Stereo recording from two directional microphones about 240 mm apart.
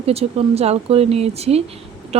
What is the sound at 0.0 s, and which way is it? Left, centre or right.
Speech, right.